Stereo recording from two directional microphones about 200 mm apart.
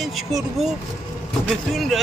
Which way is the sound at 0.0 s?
Centre (ahead or behind).